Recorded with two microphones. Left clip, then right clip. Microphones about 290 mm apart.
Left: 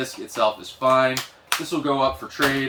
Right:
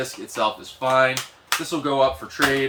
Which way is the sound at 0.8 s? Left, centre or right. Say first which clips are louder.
Even; centre.